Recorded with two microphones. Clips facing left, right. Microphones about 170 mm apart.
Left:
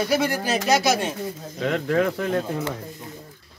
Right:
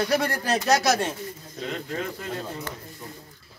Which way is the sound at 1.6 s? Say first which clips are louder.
Left 9 dB; 75° left (ahead or behind).